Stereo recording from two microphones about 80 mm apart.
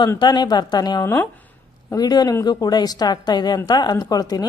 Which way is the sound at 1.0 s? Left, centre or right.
Left.